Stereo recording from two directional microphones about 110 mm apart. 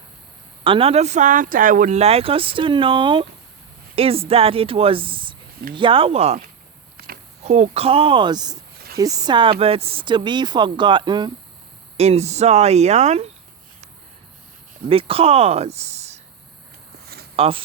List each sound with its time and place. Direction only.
0.6 s speech: 55° right (ahead or behind)
3.9 s speech: 60° right (ahead or behind)
7.4 s speech: 90° right; by 11.3 s 40° right (ahead or behind)
11.9 s speech: 75° right (ahead or behind)
14.8 s speech: 60° right (ahead or behind); by 16.2 s 80° right
17.3 s speech: 60° right (ahead or behind)